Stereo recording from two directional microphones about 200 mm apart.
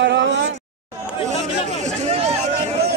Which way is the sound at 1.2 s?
35° right (ahead or behind).